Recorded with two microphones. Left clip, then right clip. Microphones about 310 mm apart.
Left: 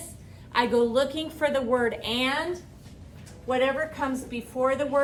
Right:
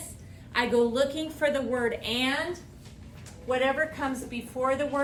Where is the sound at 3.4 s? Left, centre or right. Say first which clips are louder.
Left 1 dB; centre.